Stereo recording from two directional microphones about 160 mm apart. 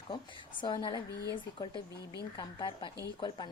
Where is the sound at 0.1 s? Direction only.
30° left (ahead or behind).